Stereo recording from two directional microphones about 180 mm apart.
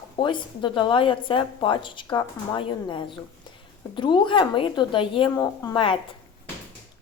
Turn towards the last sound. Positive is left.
turn(degrees=25)  # may be behind; listen again after turning